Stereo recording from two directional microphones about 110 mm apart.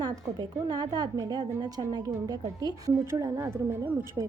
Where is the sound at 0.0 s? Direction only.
40° right (ahead or behind).